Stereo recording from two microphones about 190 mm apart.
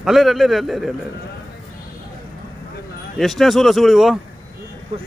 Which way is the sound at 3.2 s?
Centre (ahead or behind).